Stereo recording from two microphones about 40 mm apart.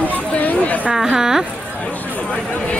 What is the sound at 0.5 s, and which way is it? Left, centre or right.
Speech, left.